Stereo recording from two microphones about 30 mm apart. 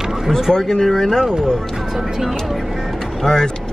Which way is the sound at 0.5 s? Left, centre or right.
Centre.